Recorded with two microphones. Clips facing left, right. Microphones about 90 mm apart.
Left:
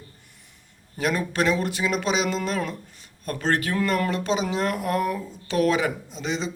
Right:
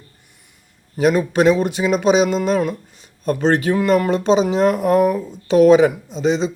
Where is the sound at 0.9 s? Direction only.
20° right (ahead or behind).